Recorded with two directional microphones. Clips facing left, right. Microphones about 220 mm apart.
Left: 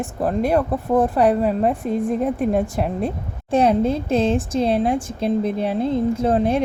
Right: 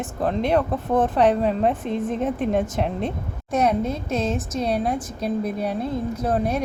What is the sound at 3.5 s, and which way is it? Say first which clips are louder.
Speech: left 5 dB; 30° left (ahead or behind).